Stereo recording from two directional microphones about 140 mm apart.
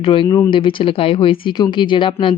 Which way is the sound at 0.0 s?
35° left (ahead or behind).